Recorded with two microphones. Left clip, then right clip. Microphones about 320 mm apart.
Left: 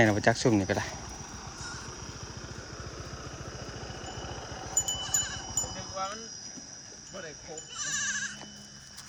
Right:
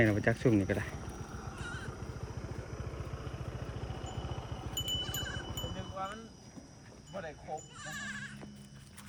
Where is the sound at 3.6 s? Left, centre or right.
Left.